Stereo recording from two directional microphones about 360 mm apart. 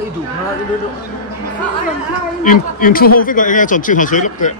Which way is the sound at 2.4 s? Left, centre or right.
Left.